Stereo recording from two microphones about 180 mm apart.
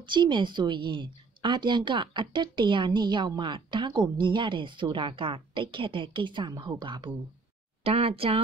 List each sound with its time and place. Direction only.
0.0 s a woman's voice: 25° right (ahead or behind)